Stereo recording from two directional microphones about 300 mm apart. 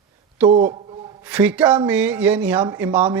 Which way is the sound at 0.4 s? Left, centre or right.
Right.